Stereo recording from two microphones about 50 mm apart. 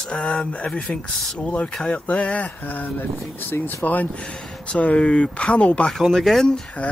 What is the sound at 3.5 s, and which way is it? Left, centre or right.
Speech, left.